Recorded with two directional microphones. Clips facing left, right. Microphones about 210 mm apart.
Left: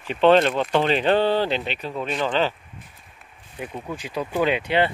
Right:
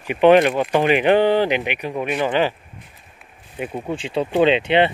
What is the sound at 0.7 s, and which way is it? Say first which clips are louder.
Speech: right 4 dB; 15° right (ahead or behind).